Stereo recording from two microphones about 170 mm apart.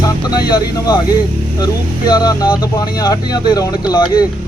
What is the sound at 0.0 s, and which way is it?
A man's voice, 25° left (ahead or behind).